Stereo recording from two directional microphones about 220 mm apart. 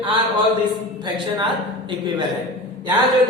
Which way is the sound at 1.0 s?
20° right (ahead or behind).